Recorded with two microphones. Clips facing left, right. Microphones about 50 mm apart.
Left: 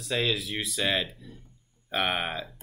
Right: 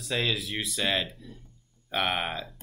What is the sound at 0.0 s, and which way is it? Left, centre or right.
Speech, centre.